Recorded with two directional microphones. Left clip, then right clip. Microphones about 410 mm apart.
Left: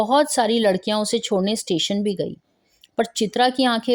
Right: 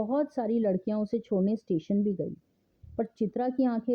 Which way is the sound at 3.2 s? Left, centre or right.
Centre.